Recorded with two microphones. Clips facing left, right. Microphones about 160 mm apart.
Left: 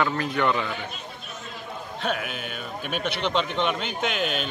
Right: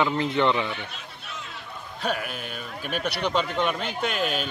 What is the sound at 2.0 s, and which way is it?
Speech, centre (ahead or behind).